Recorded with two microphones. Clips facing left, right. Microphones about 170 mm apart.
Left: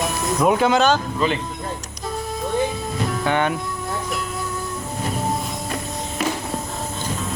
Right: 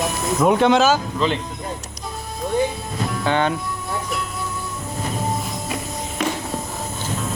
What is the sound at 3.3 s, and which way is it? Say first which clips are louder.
Speech: right 1 dB; 25° right (ahead or behind).